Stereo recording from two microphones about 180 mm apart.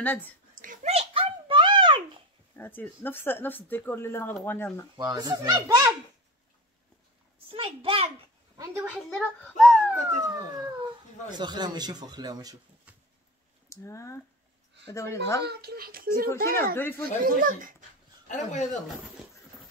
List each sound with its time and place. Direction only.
0.0 s speech: 10° left (ahead or behind)
0.6 s a sound: 45° right (ahead or behind)
0.9 s a sound: 30° right (ahead or behind)
2.5 s speech: 10° left (ahead or behind)
4.9 s speech: 25° right (ahead or behind)
7.5 s a child's voice: 30° right (ahead or behind)
8.5 s a woman's voice: 15° right (ahead or behind)
9.1 s a child's voice: centre (ahead or behind)
10.2 s speech: 20° right (ahead or behind)
13.7 s speech: 15° left (ahead or behind)
15.4 s a child's voice: 60° right (ahead or behind)
16.4 s speech: 10° left (ahead or behind)
17.0 s speech: 50° right (ahead or behind)
18.3 s speech: 45° left (ahead or behind)